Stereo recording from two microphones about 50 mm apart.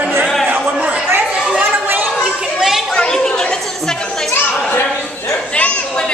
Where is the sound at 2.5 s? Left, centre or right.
Centre.